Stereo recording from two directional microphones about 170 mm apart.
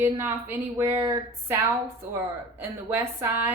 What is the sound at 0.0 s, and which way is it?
A woman's voice, 15° right (ahead or behind).